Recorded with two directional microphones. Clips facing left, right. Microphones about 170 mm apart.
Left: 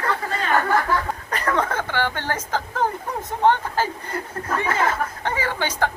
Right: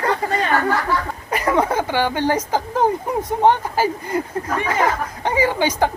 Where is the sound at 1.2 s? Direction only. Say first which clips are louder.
Right 7 dB; 10° right (ahead or behind).